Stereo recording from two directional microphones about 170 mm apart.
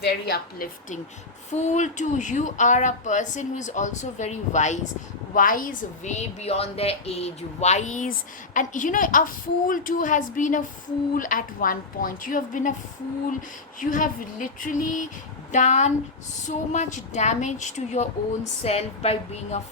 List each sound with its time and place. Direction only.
0.0 s a woman's voice: 75° left (ahead or behind)
1.5 s a woman's voice: 45° left (ahead or behind)
13.7 s a woman's voice: 50° left (ahead or behind)